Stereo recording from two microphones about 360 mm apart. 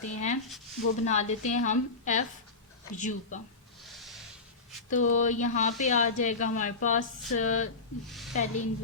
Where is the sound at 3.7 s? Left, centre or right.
Centre.